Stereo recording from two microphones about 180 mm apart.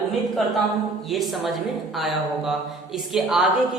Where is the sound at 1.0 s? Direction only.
Centre (ahead or behind).